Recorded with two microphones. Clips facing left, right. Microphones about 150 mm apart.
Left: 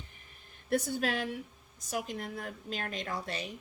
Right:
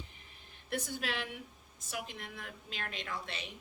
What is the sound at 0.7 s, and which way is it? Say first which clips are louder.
A woman's voice: left 7 dB; 45° left (ahead or behind).